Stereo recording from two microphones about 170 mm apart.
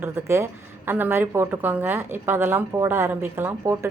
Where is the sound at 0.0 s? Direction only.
15° right (ahead or behind).